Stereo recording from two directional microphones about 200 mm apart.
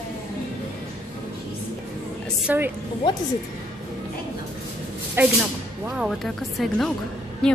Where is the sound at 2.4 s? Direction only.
10° right (ahead or behind).